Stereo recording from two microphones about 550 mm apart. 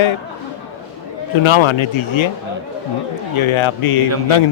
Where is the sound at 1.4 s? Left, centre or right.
Left.